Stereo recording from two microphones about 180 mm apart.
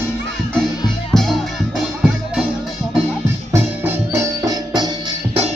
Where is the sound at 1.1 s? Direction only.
5° left (ahead or behind).